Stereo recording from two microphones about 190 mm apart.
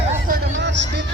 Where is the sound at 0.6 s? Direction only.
65° right (ahead or behind).